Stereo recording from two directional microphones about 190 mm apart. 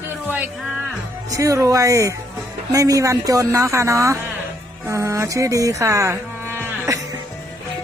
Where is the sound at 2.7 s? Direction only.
15° right (ahead or behind).